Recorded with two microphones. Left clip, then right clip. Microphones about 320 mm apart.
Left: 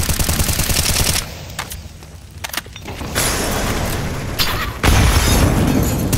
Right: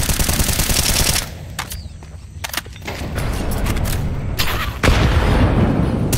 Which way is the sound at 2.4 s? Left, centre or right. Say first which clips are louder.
Even; centre.